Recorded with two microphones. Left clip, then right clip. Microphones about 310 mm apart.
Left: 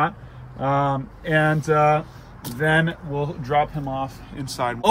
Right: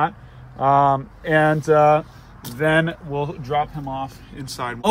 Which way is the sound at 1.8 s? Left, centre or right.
Centre.